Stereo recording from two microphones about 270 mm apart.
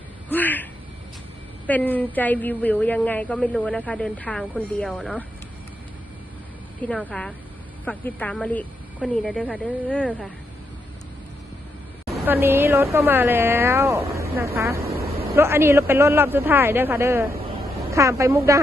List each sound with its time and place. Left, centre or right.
0.3 s a sound: centre
1.6 s a woman's voice: centre
6.8 s a woman's voice: centre
12.1 s a woman's voice: centre
14.8 s a sound: right
15.4 s a woman's voice: centre